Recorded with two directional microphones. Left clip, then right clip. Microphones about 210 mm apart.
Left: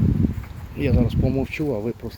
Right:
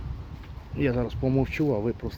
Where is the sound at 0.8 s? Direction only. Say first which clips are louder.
Left 3 dB; 5° right (ahead or behind).